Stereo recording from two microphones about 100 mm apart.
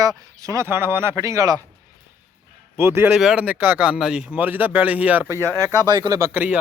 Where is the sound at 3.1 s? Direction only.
5° right (ahead or behind).